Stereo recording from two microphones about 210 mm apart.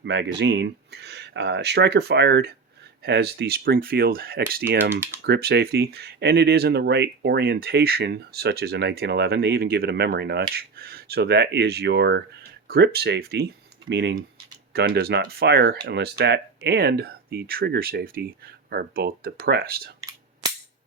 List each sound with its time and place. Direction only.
0.0 s speech: 55° right (ahead or behind)
4.9 s speech: 10° right (ahead or behind)
5.2 s speech: 50° right (ahead or behind)
20.0 s cap gun: 15° right (ahead or behind)